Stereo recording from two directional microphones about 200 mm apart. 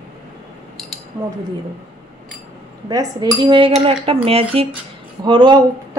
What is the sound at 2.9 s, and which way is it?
A woman's voice, 20° right (ahead or behind).